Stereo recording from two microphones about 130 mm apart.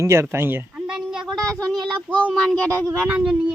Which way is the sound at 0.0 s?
20° right (ahead or behind).